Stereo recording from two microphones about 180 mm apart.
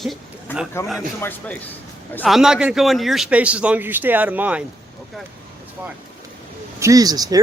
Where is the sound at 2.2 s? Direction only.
Centre (ahead or behind).